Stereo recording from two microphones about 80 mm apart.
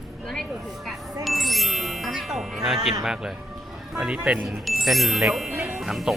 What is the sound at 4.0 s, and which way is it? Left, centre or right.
Chime, centre.